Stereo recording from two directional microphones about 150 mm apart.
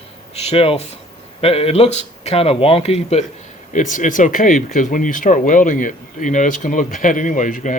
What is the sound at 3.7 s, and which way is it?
Speech, 60° left (ahead or behind).